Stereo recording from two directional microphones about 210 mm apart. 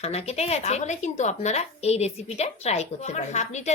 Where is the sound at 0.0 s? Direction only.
30° left (ahead or behind).